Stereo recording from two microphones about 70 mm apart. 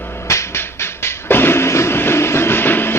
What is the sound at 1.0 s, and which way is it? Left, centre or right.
Music, left.